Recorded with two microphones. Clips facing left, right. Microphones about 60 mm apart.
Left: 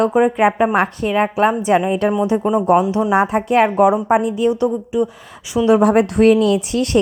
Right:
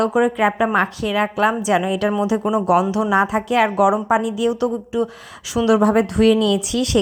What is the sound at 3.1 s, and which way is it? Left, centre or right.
Speech, left.